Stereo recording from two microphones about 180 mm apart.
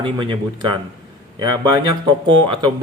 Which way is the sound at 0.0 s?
30° right (ahead or behind).